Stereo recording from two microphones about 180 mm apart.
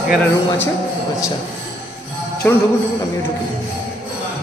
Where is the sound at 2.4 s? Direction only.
5° left (ahead or behind).